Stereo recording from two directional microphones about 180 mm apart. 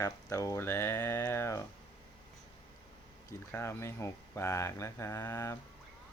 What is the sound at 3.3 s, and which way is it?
Speech, 15° left (ahead or behind).